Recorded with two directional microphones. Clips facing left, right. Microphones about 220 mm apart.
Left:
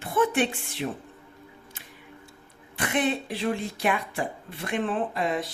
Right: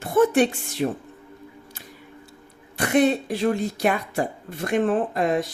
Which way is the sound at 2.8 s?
40° right (ahead or behind).